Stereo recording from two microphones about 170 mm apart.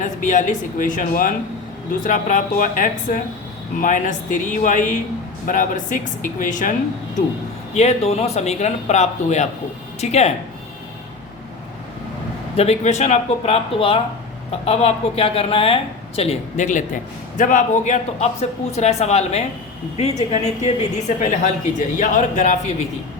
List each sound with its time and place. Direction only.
0.0 s a woman's voice: 45° left (ahead or behind)
7.8 s speech: 40° left (ahead or behind)
12.5 s a woman's voice: 40° left (ahead or behind)